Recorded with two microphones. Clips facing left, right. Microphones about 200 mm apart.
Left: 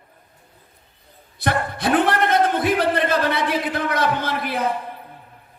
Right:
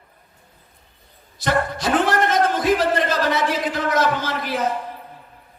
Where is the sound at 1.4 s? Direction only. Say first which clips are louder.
Right 1 dB; 60° left (ahead or behind).